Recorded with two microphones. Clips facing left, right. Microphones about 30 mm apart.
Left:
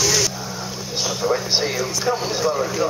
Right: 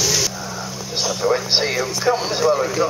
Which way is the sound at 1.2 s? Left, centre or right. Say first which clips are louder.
Right 2 dB; centre.